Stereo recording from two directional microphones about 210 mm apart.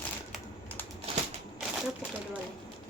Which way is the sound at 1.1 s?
25° right (ahead or behind).